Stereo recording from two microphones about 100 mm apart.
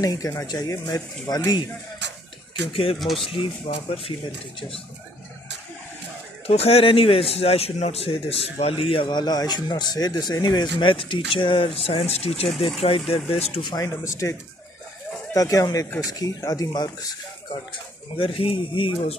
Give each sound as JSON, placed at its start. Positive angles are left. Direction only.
{"t": 0.0, "sound": "speech", "side_deg": 35}
{"t": 2.7, "sound": "speech", "side_deg": 75}
{"t": 3.0, "sound": "speech", "side_deg": 0}
{"t": 3.3, "sound": "speech", "side_deg": 75}
{"t": 4.6, "sound": "speech", "side_deg": 60}
{"t": 6.4, "sound": "a man's voice", "side_deg": 90}
{"t": 9.1, "sound": "speech", "side_deg": 45}
{"t": 14.0, "sound": "speech", "side_deg": 35}
{"t": 15.3, "sound": "speech", "side_deg": 35}
{"t": 18.1, "sound": "speech", "side_deg": 65}